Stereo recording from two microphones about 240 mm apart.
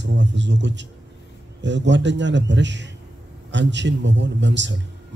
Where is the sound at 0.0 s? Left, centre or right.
Right.